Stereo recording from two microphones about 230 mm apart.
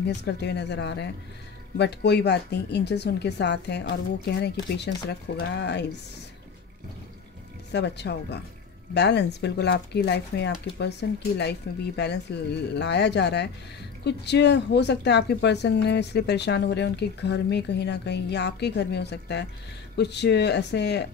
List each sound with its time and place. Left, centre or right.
0.0 s speech: left
7.7 s speech: left